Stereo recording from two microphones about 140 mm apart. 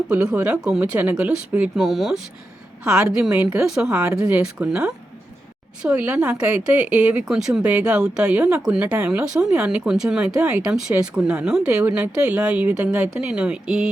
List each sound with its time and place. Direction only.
0.1 s speech: 10° right (ahead or behind)
4.6 s speech: 20° right (ahead or behind)
5.8 s speech: 5° right (ahead or behind)